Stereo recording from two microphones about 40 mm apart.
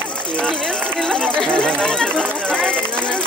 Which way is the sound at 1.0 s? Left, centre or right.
Left.